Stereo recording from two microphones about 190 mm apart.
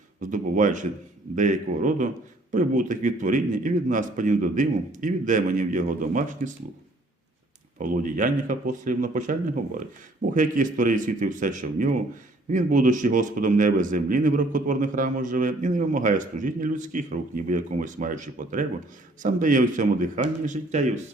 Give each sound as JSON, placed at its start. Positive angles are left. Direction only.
{"t": 0.2, "sound": "a man's voice", "side_deg": -45}
{"t": 7.8, "sound": "a man's voice", "side_deg": -45}
{"t": 10.3, "sound": "a man's voice", "side_deg": -45}